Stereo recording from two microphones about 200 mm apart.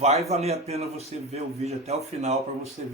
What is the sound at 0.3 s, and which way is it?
Speech, 30° right (ahead or behind).